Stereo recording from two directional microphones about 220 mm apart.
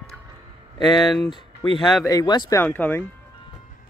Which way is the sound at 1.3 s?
20° left (ahead or behind).